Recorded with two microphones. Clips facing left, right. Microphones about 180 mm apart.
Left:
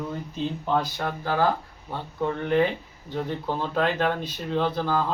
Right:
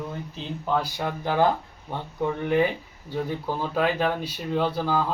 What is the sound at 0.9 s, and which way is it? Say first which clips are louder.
Speech: right 1 dB; 15° right (ahead or behind).